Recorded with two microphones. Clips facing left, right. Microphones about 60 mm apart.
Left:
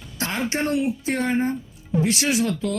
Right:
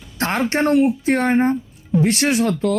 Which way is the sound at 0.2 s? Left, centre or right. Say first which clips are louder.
Right 6 dB; right.